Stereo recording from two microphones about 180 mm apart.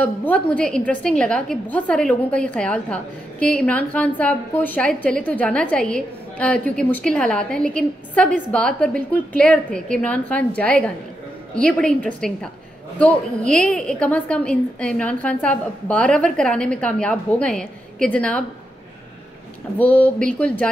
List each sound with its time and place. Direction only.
0.0 s a woman's voice: 10° left (ahead or behind)
13.5 s a woman's voice: 5° left (ahead or behind)
19.8 s a woman's voice: 10° left (ahead or behind)